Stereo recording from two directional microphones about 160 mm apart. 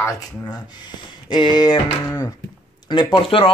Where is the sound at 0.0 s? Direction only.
20° left (ahead or behind).